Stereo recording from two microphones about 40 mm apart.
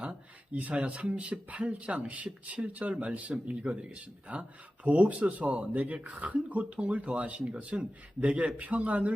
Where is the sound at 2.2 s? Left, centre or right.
Right.